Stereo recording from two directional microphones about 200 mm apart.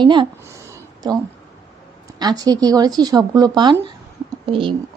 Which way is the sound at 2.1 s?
20° right (ahead or behind).